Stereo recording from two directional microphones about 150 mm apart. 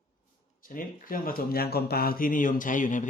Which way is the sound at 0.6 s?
70° left (ahead or behind).